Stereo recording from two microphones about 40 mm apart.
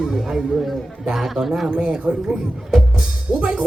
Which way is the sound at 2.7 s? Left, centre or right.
Right.